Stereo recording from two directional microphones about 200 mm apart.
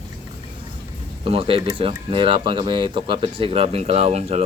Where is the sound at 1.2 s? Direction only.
30° right (ahead or behind).